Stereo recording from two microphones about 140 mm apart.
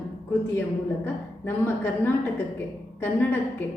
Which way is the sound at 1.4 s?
15° left (ahead or behind).